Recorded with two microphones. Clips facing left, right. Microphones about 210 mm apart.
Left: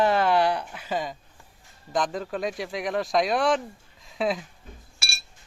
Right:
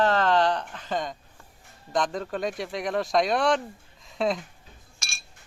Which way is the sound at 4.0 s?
Centre (ahead or behind).